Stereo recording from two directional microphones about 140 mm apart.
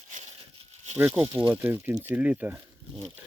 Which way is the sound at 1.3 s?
10° right (ahead or behind).